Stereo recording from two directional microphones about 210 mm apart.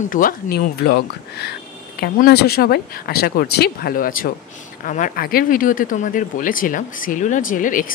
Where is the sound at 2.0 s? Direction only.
50° left (ahead or behind).